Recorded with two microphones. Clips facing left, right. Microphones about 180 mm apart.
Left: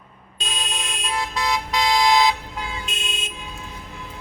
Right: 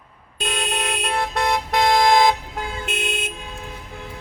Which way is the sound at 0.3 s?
60° right (ahead or behind).